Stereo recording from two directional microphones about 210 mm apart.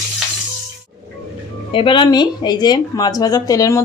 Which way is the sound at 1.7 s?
25° left (ahead or behind).